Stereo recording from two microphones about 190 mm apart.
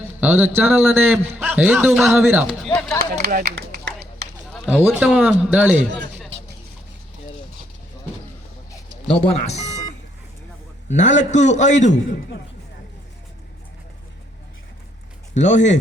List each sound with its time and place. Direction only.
0.2 s a man's voice: 10° right (ahead or behind)
3.0 s speech: 55° right (ahead or behind)
4.5 s a sound: 5° left (ahead or behind)
4.8 s a man's voice: 5° right (ahead or behind)
8.7 s a sound: 25° left (ahead or behind)
10.8 s a man's voice: 40° left (ahead or behind)
15.4 s a man's voice: 40° left (ahead or behind)